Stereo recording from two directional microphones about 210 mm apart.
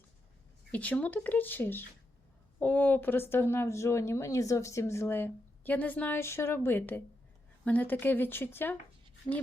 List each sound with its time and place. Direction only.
0.7 s a woman's voice: 5° left (ahead or behind)